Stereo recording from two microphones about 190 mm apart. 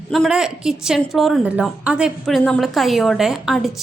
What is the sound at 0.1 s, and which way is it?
A woman's voice, centre (ahead or behind).